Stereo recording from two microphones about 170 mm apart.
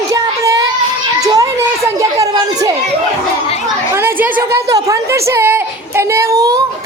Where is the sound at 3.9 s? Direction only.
15° right (ahead or behind).